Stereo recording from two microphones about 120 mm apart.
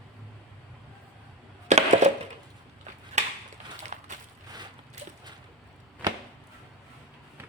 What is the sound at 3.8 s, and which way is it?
Crushing, 80° right.